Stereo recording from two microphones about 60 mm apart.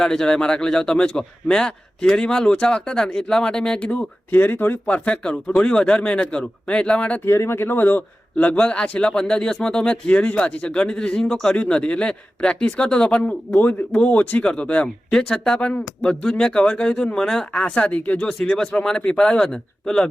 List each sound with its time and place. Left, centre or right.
0.0 s a man's voice: centre
4.3 s speech: left
4.9 s a man's voice: left
7.3 s a man's voice: left; by 13.6 s centre
13.6 s a man's voice: left
14.4 s a man's voice: centre
15.5 s a man's voice: left
17.2 s a man's voice: centre
17.5 s a man's voice: left